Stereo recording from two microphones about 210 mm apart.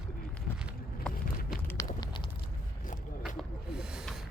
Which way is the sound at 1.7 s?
15° left (ahead or behind).